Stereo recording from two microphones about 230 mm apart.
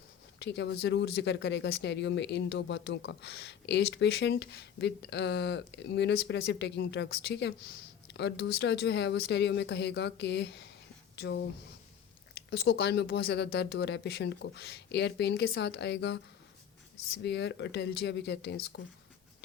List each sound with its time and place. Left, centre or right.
0.3 s speech: left
12.5 s speech: left
17.2 s speech: left